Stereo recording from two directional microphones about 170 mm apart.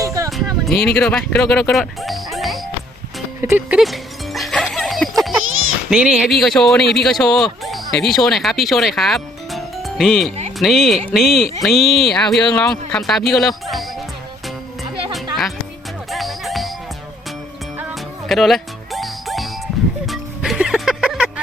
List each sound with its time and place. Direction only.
0.0 s music: 20° right (ahead or behind)
0.3 s music: centre (ahead or behind)
0.9 s speech: 5° left (ahead or behind)
3.4 s speech: 15° right (ahead or behind)
3.8 s music: centre (ahead or behind)
5.9 s speech: 5° right (ahead or behind)
16.0 s music: centre (ahead or behind)
17.9 s music: centre (ahead or behind)